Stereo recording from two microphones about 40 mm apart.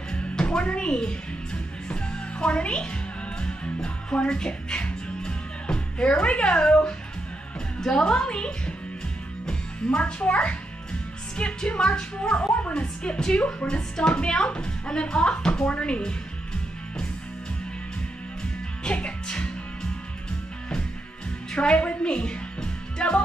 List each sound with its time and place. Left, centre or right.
0.1 s music: left
7.9 s a woman's voice: left
9.8 s a woman's voice: left
18.9 s music: left
21.5 s a woman's voice: left